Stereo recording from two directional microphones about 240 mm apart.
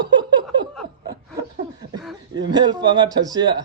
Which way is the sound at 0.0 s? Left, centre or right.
Centre.